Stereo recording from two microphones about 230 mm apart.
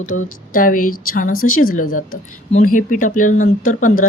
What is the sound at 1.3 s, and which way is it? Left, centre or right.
Speech, left.